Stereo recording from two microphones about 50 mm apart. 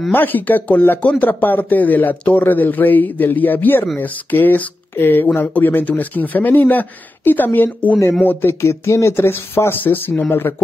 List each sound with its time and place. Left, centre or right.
0.1 s speech: left
8.5 s speech: left